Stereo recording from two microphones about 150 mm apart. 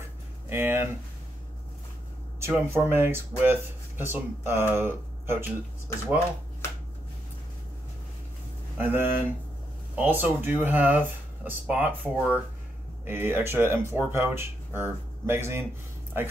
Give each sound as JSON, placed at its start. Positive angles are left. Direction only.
{"t": 0.5, "sound": "speech", "side_deg": -15}
{"t": 2.4, "sound": "speech", "side_deg": -15}
{"t": 8.7, "sound": "speech", "side_deg": -15}